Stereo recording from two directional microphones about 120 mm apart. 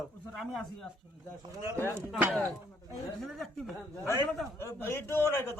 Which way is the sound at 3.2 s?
Centre (ahead or behind).